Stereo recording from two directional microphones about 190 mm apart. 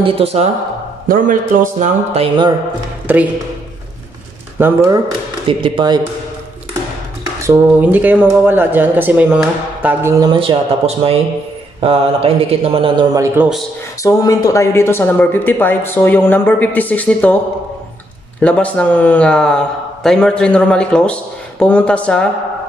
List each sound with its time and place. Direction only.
0.0 s a man's voice: 30° right (ahead or behind)
1.0 s a man's voice: 45° right (ahead or behind); by 2.5 s 25° right (ahead or behind)
3.1 s speech: 10° right (ahead or behind)
4.6 s speech: 15° right (ahead or behind)
5.5 s a man's voice: 25° right (ahead or behind)
7.4 s speech: 10° right (ahead or behind)
11.8 s a man's voice: 30° right (ahead or behind)
14.0 s speech: 20° left (ahead or behind)
18.4 s a man's voice: 5° left (ahead or behind)